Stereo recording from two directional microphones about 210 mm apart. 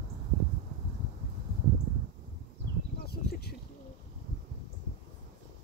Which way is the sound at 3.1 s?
50° left (ahead or behind).